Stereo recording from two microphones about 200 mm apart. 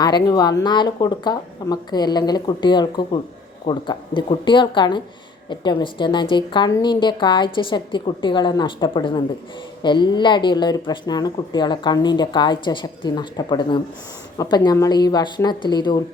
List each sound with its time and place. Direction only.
0.0 s speech: 20° left (ahead or behind)